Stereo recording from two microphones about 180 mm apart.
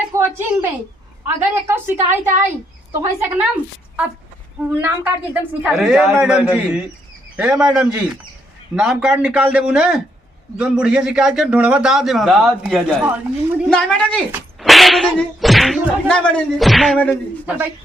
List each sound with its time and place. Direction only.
0.2 s a woman's voice: 15° right (ahead or behind)
4.7 s a man's voice: 15° right (ahead or behind)
13.7 s a man's voice: 5° left (ahead or behind)